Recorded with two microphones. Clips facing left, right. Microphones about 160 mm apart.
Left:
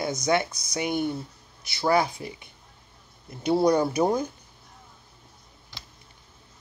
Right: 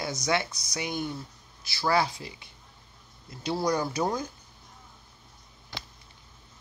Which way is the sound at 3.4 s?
25° left (ahead or behind).